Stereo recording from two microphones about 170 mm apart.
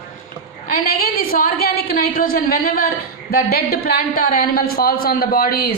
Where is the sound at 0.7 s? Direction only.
60° left (ahead or behind).